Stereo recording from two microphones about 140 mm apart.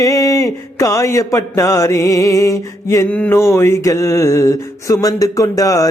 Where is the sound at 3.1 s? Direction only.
10° left (ahead or behind).